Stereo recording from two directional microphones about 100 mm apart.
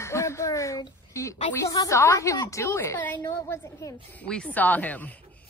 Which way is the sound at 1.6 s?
35° left (ahead or behind).